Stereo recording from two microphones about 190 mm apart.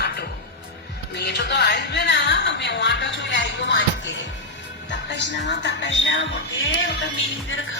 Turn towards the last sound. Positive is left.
turn(degrees=90)